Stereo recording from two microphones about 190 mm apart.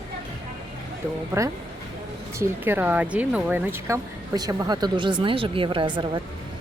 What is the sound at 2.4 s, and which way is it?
Speech, 10° right (ahead or behind).